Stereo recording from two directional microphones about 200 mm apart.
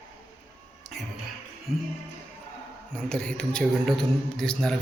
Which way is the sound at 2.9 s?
5° left (ahead or behind).